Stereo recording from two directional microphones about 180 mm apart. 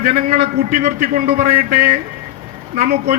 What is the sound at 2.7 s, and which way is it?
Speech, 40° right (ahead or behind).